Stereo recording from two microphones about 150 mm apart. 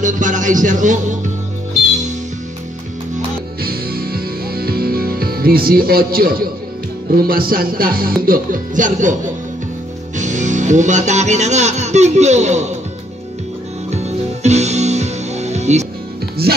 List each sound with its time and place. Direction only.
0.0 s speech: 55° right (ahead or behind)
3.6 s music: 90° right; by 12.6 s 50° right (ahead or behind)
14.0 s music: 50° right (ahead or behind)